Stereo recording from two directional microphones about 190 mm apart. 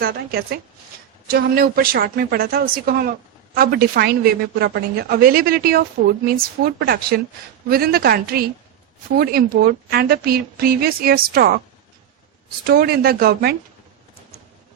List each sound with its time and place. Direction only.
0.0 s a woman's voice: 50° right (ahead or behind)
12.6 s a woman's voice: 55° right (ahead or behind)